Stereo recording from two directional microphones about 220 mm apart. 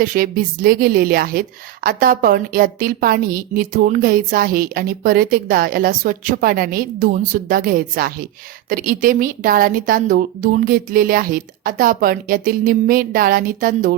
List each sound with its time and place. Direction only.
0.0 s a woman's voice: 40° right (ahead or behind)